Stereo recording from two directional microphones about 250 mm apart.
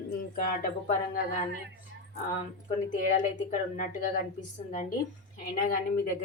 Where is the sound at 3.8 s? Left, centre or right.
Left.